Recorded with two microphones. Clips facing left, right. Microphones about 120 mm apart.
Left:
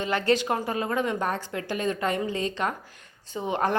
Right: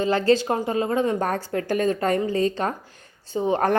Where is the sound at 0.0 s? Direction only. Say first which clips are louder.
Right 5 dB; 30° right (ahead or behind).